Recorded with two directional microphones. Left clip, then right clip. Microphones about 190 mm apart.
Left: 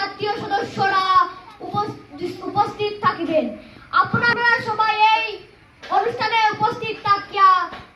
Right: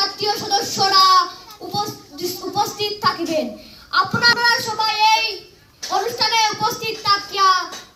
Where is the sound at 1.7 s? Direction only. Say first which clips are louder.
Even; 5° left (ahead or behind).